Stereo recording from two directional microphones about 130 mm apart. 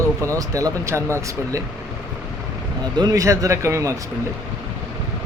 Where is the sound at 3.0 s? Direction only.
25° right (ahead or behind).